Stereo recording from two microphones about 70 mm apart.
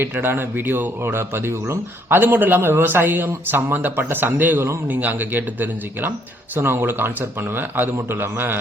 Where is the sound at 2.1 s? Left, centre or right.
Right.